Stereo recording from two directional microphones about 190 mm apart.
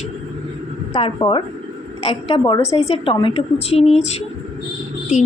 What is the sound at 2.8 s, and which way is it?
A woman's voice, 30° left (ahead or behind).